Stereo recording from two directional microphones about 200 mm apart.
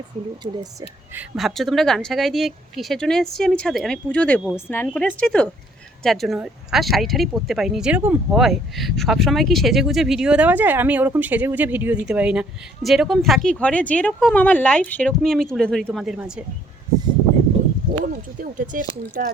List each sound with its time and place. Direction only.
0.4 s speech: 15° right (ahead or behind)
1.4 s speech: centre (ahead or behind)
18.0 s speech: 45° right (ahead or behind)